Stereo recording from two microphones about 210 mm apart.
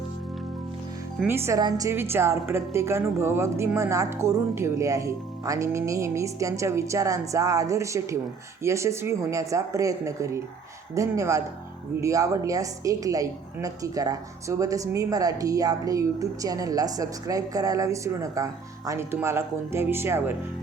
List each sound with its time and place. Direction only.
1.2 s a woman's voice: 10° right (ahead or behind)